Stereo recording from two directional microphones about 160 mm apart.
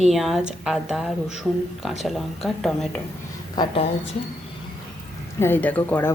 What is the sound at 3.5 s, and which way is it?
Speech, 30° left (ahead or behind).